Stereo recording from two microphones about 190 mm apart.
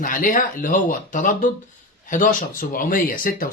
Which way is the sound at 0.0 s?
45° left (ahead or behind).